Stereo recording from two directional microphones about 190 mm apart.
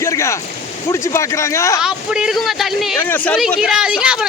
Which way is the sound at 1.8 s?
5° right (ahead or behind).